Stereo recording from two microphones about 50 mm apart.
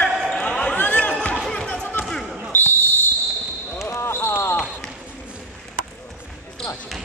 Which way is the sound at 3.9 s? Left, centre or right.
Left.